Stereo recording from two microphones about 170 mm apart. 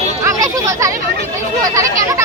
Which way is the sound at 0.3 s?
20° right (ahead or behind).